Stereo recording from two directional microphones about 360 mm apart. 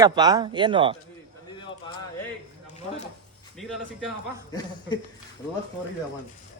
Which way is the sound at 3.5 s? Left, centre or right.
Centre.